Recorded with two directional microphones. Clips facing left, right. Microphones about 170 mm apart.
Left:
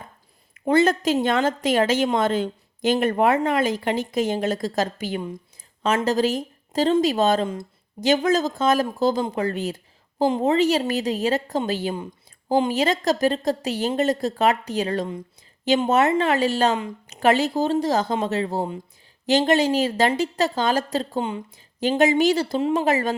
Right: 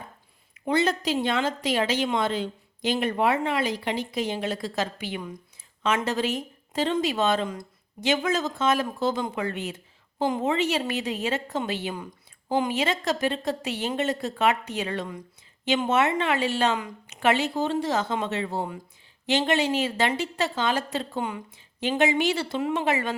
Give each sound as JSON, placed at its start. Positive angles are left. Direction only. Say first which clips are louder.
{"t": 0.5, "sound": "a woman's voice", "louder": "left 6 dB", "side_deg": 50}
{"t": 7.4, "sound": "speech", "louder": "left 4 dB", "side_deg": 25}
{"t": 8.0, "sound": "a woman's voice", "louder": "left 5 dB", "side_deg": 40}
{"t": 21.2, "sound": "speech", "louder": "left 4 dB", "side_deg": 25}
{"t": 21.5, "sound": "a woman's voice", "louder": "left 7 dB", "side_deg": 40}